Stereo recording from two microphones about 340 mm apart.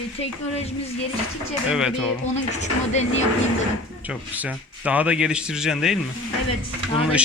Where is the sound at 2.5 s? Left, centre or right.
Centre.